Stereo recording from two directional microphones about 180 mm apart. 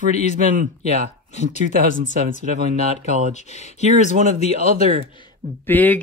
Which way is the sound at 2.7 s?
40° right (ahead or behind).